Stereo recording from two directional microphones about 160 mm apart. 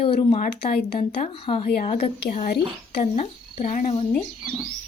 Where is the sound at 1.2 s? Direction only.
35° left (ahead or behind).